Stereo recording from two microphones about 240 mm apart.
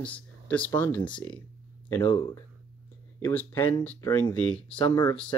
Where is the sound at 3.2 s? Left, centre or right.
Centre.